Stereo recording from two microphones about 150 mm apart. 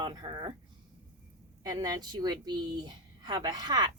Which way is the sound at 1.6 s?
25° right (ahead or behind).